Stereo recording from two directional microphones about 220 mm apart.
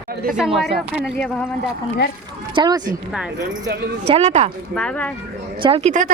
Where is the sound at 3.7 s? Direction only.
50° right (ahead or behind).